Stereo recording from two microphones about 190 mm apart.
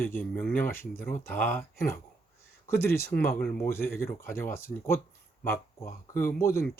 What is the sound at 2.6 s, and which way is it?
Speech, 10° left (ahead or behind).